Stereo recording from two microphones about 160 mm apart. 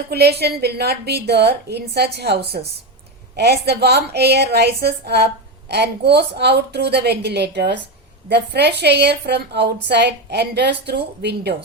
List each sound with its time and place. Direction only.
0.1 s a woman's voice: 90° right